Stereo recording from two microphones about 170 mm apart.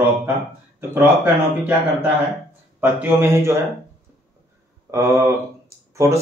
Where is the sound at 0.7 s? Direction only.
15° right (ahead or behind).